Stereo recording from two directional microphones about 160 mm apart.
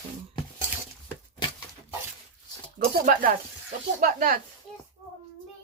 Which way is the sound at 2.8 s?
55° right (ahead or behind).